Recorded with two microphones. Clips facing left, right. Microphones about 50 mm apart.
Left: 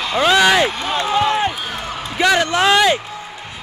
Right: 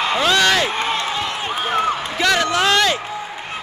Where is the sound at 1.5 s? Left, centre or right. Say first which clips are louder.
Right 7 dB; right.